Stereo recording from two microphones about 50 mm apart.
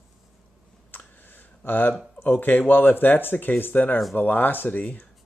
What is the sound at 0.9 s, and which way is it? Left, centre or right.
Computer keyboard, left.